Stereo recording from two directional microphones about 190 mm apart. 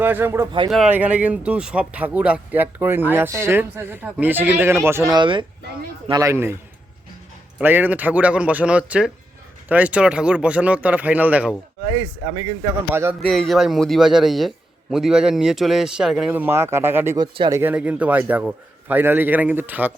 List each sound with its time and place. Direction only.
0.0 s speech: 10° right (ahead or behind)
7.6 s speech: 10° right (ahead or behind)
12.2 s speech: 20° right (ahead or behind)
12.9 s speech: 10° right (ahead or behind)
13.1 s a man's voice: 5° left (ahead or behind)
17.2 s speech: 25° right (ahead or behind)
17.6 s speech: 10° right (ahead or behind)